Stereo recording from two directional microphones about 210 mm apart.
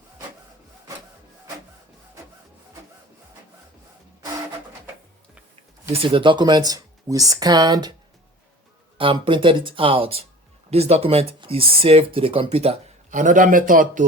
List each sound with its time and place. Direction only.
5.9 s speech: 25° right (ahead or behind)
9.0 s speech: 25° right (ahead or behind); by 14.0 s 40° right (ahead or behind)